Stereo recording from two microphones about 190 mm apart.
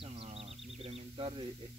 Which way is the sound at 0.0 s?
30° right (ahead or behind).